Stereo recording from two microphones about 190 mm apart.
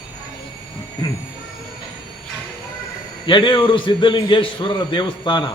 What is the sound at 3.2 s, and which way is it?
A man's voice, 25° left (ahead or behind).